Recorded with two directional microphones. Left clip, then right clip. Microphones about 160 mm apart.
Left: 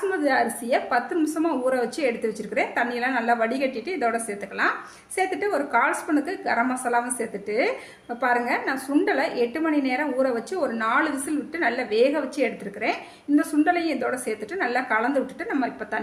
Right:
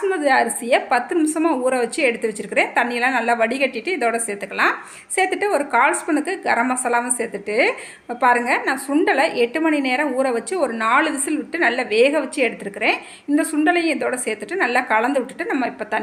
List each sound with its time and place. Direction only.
0.1 s a woman's voice: 25° right (ahead or behind)